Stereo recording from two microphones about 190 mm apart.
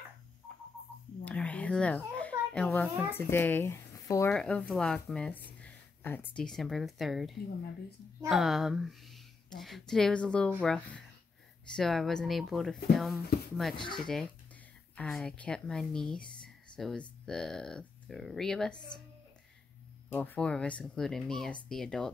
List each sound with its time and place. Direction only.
1.2 s babbling: 5° left (ahead or behind)
3.1 s speech: 10° left (ahead or behind)
13.3 s a sound: 55° left (ahead or behind)
13.9 s speech: centre (ahead or behind)
20.1 s speech: 10° left (ahead or behind)